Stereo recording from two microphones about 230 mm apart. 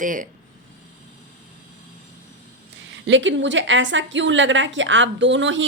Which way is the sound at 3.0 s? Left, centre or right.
Right.